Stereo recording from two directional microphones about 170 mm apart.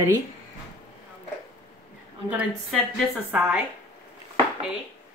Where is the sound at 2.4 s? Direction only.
5° right (ahead or behind).